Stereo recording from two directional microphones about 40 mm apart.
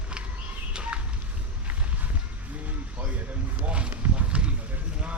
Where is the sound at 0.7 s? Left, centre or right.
Right.